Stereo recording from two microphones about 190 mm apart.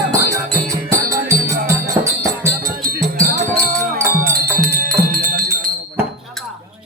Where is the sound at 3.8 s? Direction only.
15° right (ahead or behind).